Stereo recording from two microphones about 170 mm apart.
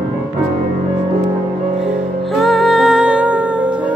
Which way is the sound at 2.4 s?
Centre (ahead or behind).